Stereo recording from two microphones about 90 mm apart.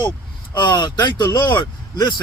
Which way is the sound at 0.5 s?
55° left (ahead or behind).